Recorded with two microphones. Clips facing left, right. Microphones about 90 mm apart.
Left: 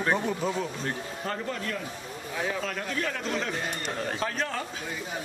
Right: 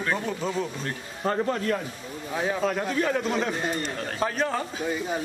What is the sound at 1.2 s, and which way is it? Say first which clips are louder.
Speech: right 9 dB; 35° right (ahead or behind).